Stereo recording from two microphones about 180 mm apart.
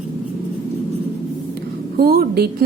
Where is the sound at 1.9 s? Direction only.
60° right (ahead or behind).